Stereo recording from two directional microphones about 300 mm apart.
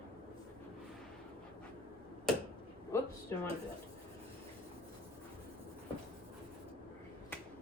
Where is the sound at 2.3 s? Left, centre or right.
Centre.